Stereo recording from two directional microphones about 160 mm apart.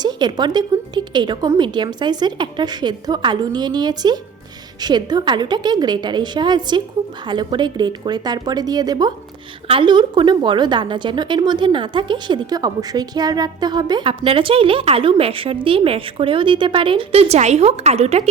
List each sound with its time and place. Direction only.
0.0 s a woman's voice: 25° right (ahead or behind)